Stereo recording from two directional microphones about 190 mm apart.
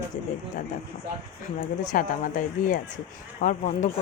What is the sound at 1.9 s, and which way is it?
Speech, 45° left (ahead or behind).